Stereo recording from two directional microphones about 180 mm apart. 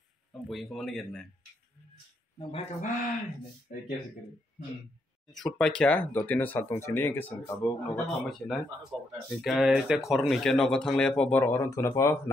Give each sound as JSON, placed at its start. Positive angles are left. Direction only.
{"t": 0.5, "sound": "speech", "side_deg": 0}
{"t": 2.3, "sound": "speech", "side_deg": 35}
{"t": 5.3, "sound": "speech", "side_deg": 5}